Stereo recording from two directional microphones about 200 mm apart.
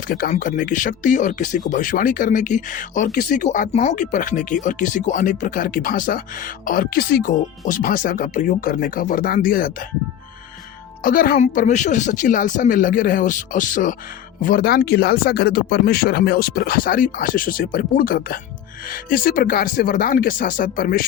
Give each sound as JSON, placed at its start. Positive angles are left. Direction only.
{"t": 0.1, "sound": "speech", "side_deg": 45}
{"t": 11.0, "sound": "speech", "side_deg": 45}